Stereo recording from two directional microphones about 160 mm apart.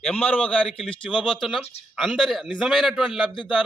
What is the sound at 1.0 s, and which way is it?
Speech, 30° left (ahead or behind).